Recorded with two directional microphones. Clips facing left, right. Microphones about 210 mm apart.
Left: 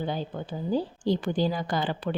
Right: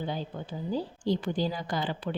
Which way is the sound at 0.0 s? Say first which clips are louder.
Left 3 dB; 60° left (ahead or behind).